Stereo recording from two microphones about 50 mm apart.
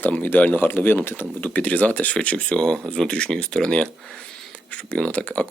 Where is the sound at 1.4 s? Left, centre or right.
Left.